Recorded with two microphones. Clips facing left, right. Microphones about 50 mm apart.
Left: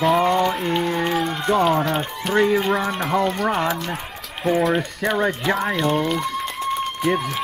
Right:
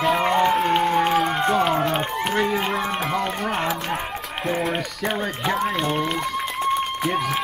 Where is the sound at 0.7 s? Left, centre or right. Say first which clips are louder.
Right 2 dB; centre.